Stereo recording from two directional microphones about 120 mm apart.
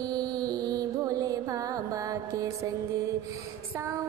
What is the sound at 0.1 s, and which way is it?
Music, 30° right (ahead or behind).